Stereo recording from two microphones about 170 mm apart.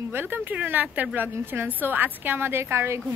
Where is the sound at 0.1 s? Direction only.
10° right (ahead or behind).